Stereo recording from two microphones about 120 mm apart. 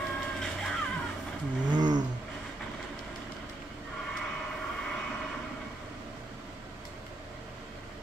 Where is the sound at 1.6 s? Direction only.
35° right (ahead or behind).